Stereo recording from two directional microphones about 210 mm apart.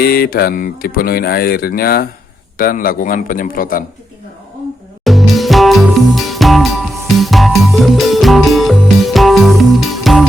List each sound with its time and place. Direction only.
0.0 s a man's voice: 45° left (ahead or behind)
5.0 s music: centre (ahead or behind)